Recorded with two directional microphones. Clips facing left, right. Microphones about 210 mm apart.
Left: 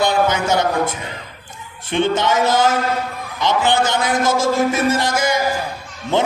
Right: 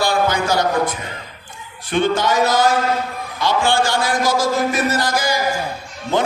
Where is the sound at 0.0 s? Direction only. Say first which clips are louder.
Left 1 dB; 20° left (ahead or behind).